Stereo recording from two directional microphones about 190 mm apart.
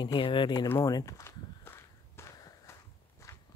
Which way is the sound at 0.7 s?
15° left (ahead or behind).